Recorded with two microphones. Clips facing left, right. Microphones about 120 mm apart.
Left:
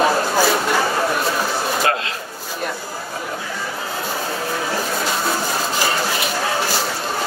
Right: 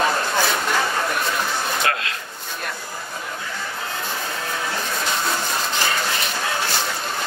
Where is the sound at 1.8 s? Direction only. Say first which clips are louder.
Left 4 dB; 25° left (ahead or behind).